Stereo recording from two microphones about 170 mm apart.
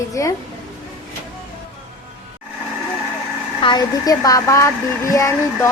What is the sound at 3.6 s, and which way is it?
A woman's voice, 25° left (ahead or behind).